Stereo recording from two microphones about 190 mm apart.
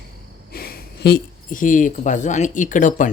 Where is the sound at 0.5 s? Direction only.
55° left (ahead or behind).